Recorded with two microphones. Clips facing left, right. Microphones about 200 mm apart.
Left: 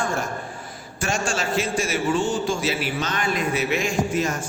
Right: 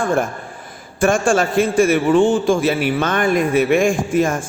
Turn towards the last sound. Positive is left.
turn(degrees=-50)  # may be behind; listen again after turning